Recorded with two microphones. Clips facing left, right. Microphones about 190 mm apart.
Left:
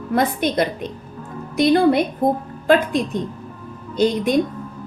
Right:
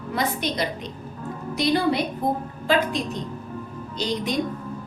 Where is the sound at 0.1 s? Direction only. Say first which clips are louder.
Left 7 dB; 55° left (ahead or behind).